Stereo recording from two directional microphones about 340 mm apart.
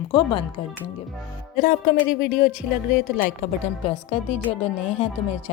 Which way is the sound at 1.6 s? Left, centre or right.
Left.